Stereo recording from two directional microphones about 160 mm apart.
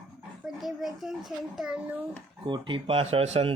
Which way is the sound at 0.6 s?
Centre (ahead or behind).